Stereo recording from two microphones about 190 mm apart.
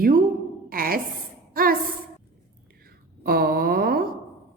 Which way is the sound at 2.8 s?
55° right (ahead or behind).